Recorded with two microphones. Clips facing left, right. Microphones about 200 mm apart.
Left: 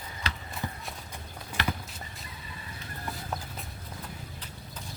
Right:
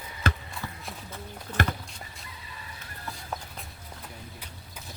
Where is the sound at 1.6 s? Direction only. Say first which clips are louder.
Right 4 dB; 50° right (ahead or behind).